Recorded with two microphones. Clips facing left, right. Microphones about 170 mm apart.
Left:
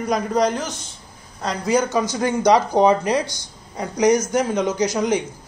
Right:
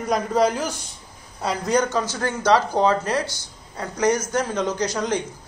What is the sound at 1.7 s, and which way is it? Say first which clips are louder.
A man's voice: left 3 dB; 10° left (ahead or behind).